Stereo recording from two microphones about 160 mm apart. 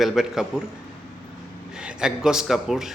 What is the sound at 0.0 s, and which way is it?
Speech, centre (ahead or behind).